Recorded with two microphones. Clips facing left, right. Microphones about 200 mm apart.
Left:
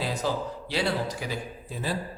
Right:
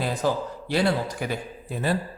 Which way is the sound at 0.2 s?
50° right (ahead or behind).